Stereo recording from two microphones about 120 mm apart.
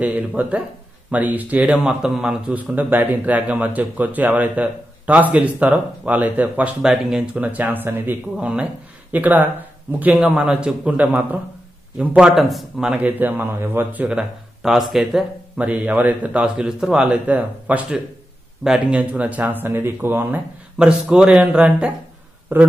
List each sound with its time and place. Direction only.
0.0 s a man's voice: 15° right (ahead or behind)
12.9 s a man's voice: 15° right (ahead or behind)
14.0 s speech: 5° right (ahead or behind)
15.6 s a man's voice: 15° right (ahead or behind)